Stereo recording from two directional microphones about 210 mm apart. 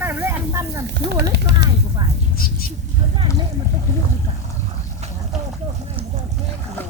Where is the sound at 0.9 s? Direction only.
55° right (ahead or behind).